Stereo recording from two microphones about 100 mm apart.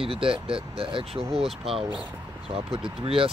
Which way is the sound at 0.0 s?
65° right (ahead or behind).